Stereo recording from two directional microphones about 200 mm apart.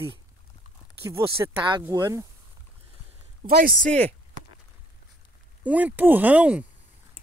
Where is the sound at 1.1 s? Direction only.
15° right (ahead or behind).